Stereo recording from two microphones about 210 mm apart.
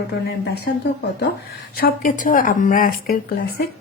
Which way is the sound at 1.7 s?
45° left (ahead or behind).